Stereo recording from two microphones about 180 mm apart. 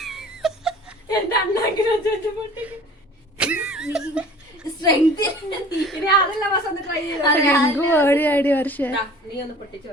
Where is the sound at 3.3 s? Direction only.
5° right (ahead or behind).